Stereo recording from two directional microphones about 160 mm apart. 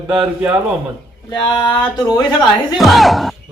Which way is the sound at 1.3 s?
25° left (ahead or behind).